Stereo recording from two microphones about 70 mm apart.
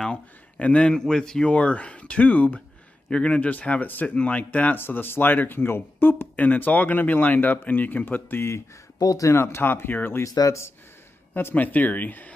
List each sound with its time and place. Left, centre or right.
0.0 s speech: centre; by 8.6 s left
9.0 s speech: left
9.3 s speech: left
11.3 s speech: left